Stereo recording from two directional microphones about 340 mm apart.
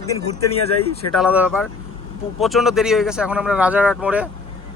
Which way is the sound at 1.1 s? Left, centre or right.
Centre.